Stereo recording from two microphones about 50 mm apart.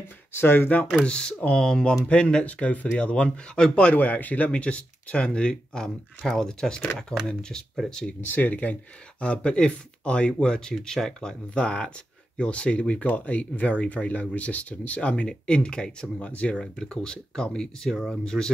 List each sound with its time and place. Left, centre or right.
0.3 s speech: left
1.0 s speech: centre
2.0 s speech: left
3.9 s a man's voice: left; by 7.6 s centre
8.2 s a man's voice: left
9.2 s speech: left